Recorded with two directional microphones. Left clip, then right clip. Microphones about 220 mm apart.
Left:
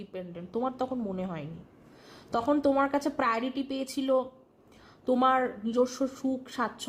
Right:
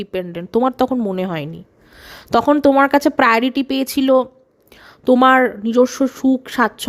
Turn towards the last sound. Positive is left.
turn(degrees=-45)  # may be behind; listen again after turning